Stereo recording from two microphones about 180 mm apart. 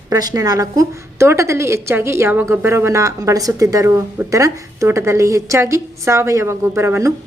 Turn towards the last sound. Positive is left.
turn(degrees=-15)  # may be behind; listen again after turning